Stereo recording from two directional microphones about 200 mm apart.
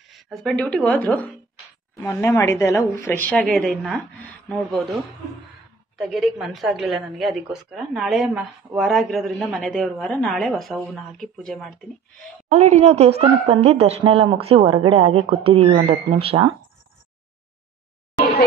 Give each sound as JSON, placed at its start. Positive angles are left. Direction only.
{"t": 0.1, "sound": "a woman's voice", "side_deg": 0}
{"t": 5.9, "sound": "a woman's voice", "side_deg": 0}
{"t": 12.4, "sound": "a woman's voice", "side_deg": -35}